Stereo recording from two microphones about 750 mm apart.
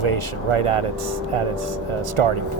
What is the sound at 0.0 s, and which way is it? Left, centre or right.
Speech, right.